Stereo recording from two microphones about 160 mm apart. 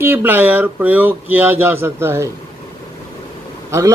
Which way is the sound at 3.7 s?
20° right (ahead or behind).